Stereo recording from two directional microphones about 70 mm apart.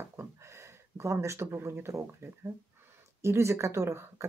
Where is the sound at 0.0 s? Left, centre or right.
Right.